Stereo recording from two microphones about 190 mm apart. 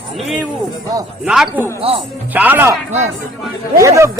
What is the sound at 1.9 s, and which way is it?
Speech, 30° right (ahead or behind).